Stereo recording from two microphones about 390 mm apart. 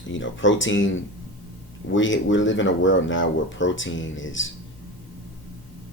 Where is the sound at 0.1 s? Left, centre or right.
Left.